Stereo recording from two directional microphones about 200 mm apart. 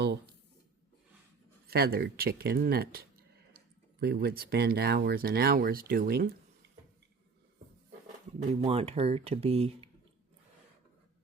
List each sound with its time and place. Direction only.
1.6 s speech: 50° right (ahead or behind)
4.0 s speech: 55° right (ahead or behind)
8.6 s speech: 30° right (ahead or behind)